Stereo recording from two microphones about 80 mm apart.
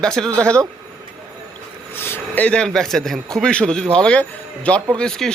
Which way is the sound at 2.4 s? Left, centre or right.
Centre.